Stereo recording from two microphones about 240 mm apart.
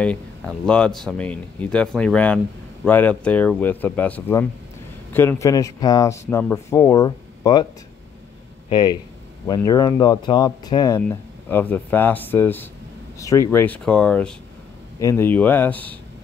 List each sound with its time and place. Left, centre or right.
0.0 s speech: centre
8.6 s speech: centre